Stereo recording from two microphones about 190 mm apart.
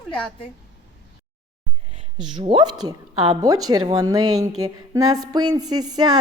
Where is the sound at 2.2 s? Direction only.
25° right (ahead or behind).